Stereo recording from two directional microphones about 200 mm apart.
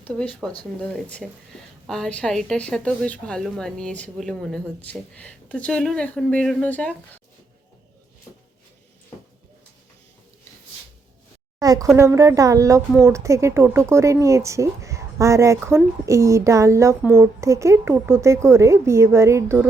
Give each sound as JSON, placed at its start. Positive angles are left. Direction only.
{"t": 0.0, "sound": "a woman's voice", "side_deg": 5}
{"t": 11.6, "sound": "a sound", "side_deg": -20}
{"t": 11.9, "sound": "speech", "side_deg": -15}